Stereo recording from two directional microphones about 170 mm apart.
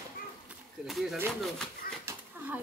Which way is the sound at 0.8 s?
Centre (ahead or behind).